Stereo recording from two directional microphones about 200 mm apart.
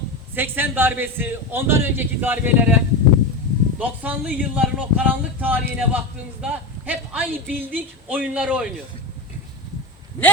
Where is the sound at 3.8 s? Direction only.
5° right (ahead or behind).